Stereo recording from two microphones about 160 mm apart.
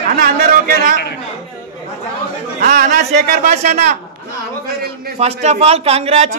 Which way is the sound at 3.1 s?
45° right (ahead or behind).